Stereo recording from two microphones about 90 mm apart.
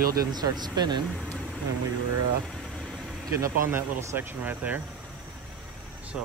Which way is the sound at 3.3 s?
35° right (ahead or behind).